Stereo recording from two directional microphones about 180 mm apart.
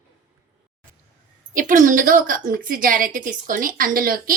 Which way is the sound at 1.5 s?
45° right (ahead or behind).